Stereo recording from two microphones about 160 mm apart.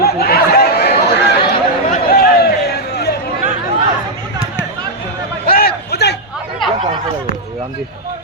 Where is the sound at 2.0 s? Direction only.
70° left (ahead or behind); by 3.1 s 85° left.